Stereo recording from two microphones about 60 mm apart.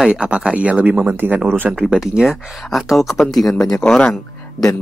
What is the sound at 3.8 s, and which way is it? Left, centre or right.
Speech, centre.